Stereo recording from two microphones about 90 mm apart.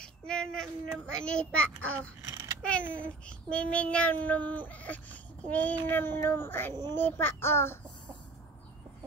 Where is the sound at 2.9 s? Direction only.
15° left (ahead or behind).